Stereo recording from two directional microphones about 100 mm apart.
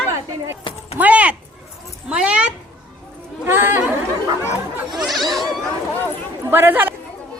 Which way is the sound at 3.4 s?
20° right (ahead or behind).